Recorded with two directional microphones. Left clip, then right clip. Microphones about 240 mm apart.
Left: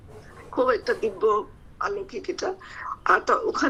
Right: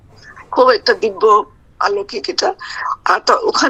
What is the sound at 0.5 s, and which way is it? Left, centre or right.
A woman's voice, right.